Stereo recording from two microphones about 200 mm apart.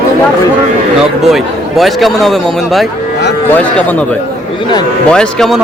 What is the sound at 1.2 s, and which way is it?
A man's voice, centre (ahead or behind).